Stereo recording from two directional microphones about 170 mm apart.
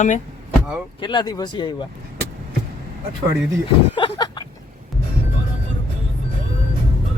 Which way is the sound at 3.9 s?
30° left (ahead or behind).